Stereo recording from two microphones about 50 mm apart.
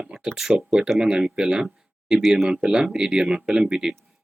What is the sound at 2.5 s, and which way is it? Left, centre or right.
Speech, centre.